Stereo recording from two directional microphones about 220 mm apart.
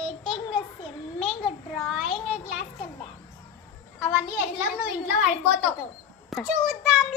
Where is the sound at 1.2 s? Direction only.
Centre (ahead or behind).